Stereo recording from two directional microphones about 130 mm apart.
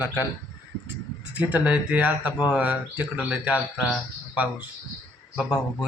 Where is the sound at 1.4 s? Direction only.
10° right (ahead or behind).